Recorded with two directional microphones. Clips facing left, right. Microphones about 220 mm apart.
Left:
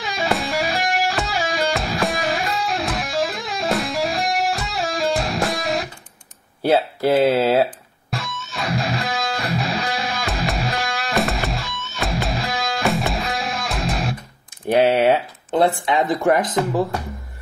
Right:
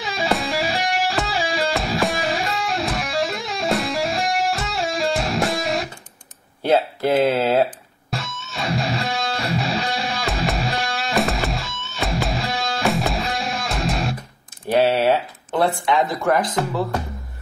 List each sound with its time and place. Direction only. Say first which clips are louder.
0.0 s music: even; centre (ahead or behind)
6.6 s speech: left 1 dB; 10° left (ahead or behind)
8.1 s music: left 1 dB; centre (ahead or behind)
14.7 s speech: left 2 dB; 15° left (ahead or behind)